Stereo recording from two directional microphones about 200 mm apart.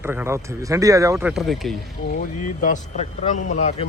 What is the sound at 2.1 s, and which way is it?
Speech, 40° left (ahead or behind).